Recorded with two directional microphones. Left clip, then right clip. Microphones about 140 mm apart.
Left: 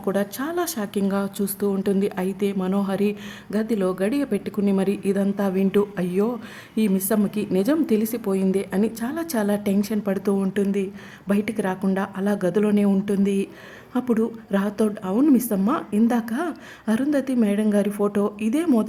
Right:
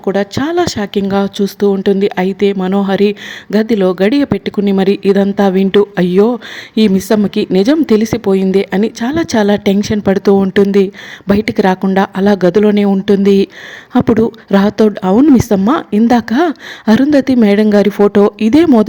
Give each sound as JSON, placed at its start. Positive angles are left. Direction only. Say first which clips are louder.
{"t": 0.0, "sound": "speech", "louder": "right 10 dB", "side_deg": -25}